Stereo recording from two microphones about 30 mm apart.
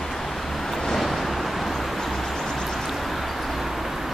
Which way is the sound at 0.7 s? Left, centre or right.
Centre.